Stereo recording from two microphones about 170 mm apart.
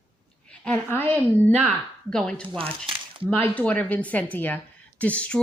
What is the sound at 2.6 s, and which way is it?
Speech, 35° right (ahead or behind).